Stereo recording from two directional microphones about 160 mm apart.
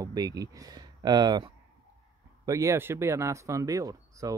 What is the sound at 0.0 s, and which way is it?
Speech, 25° right (ahead or behind).